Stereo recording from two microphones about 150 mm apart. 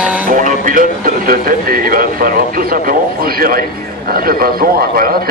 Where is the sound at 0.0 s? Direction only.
10° right (ahead or behind).